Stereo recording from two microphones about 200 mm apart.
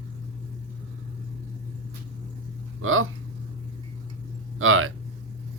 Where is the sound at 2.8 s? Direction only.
90° right.